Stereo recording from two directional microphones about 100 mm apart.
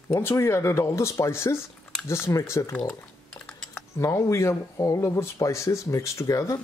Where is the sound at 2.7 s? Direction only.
10° left (ahead or behind).